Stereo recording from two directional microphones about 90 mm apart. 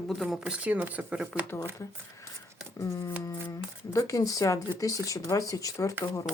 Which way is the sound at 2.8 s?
40° left (ahead or behind).